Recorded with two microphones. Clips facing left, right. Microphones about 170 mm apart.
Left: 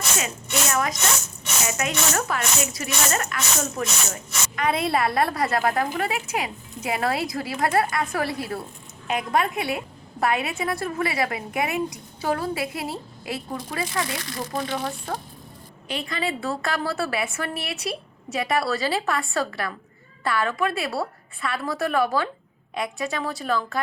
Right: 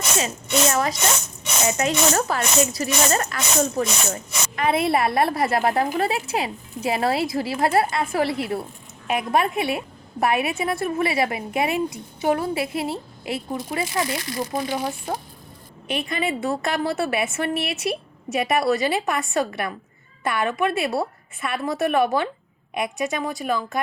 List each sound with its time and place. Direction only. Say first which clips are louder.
0.7 s speech: right 2 dB; 30° right (ahead or behind)
14.3 s a woman's voice: right 2 dB; 10° right (ahead or behind)
15.9 s a woman's voice: right 3 dB; 20° right (ahead or behind)